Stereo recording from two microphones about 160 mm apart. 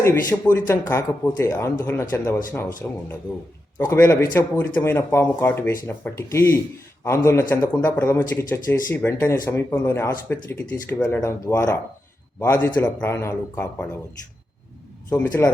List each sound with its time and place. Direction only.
0.0 s speech: 15° left (ahead or behind)
15.1 s speech: 15° left (ahead or behind)